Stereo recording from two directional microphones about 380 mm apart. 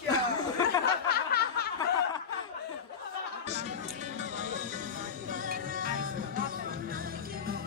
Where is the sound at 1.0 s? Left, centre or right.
Left.